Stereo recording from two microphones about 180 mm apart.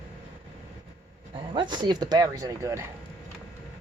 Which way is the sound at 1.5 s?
25° right (ahead or behind).